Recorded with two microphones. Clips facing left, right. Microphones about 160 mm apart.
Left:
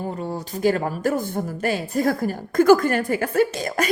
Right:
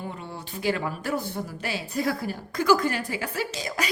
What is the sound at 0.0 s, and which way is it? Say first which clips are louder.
A woman's voice: left 8 dB; 40° left (ahead or behind).